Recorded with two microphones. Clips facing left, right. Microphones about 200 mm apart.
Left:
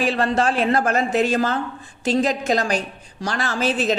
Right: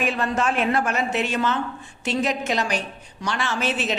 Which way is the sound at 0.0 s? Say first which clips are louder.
Left 4 dB; 30° left (ahead or behind).